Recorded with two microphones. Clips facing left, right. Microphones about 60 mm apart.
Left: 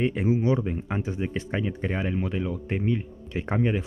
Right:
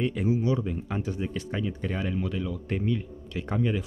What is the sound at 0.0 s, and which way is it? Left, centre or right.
Speech, left.